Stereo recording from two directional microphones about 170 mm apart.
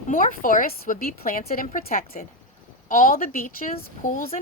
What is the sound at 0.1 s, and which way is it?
A woman's voice, 55° left (ahead or behind).